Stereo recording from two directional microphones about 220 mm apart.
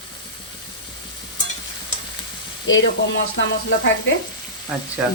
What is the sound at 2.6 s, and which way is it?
Speech, 60° left (ahead or behind).